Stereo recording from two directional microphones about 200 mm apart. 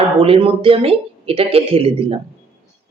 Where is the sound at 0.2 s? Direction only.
30° right (ahead or behind).